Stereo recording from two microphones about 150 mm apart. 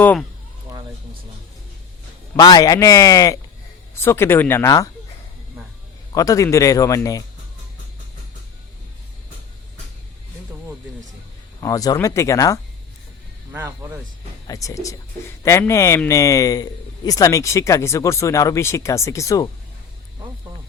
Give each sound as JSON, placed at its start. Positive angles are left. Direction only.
{"t": 0.0, "sound": "speech", "side_deg": 10}
{"t": 2.3, "sound": "a man's voice", "side_deg": 25}
{"t": 6.1, "sound": "a man's voice", "side_deg": 20}
{"t": 11.6, "sound": "a man's voice", "side_deg": 25}
{"t": 13.5, "sound": "speech", "side_deg": -20}
{"t": 14.4, "sound": "a man's voice", "side_deg": 25}